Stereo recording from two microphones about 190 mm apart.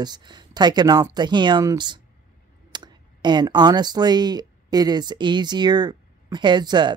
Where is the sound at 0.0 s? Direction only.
20° right (ahead or behind).